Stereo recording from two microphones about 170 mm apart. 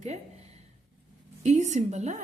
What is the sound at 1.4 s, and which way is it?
Speech, 45° right (ahead or behind).